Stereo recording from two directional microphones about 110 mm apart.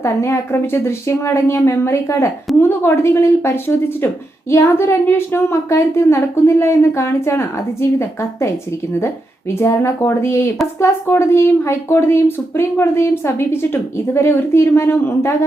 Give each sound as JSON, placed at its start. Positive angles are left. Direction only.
{"t": 0.0, "sound": "speech", "side_deg": 25}